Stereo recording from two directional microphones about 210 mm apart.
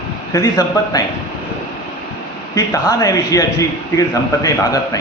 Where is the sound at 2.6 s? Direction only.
15° left (ahead or behind).